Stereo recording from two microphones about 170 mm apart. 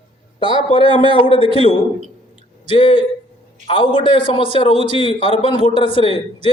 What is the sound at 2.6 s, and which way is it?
A man's voice, 30° left (ahead or behind).